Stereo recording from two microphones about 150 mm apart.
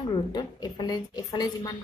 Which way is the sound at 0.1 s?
30° left (ahead or behind).